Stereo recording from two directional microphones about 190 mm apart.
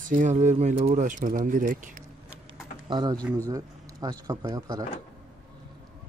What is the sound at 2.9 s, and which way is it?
Speech, 20° right (ahead or behind).